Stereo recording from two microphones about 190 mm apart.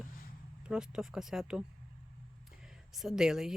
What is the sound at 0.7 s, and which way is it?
Speech, 5° right (ahead or behind).